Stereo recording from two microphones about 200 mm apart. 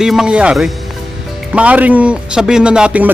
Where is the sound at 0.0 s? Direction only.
5° right (ahead or behind).